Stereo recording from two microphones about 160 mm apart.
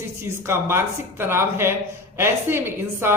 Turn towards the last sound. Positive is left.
turn(degrees=-15)  # may be behind; listen again after turning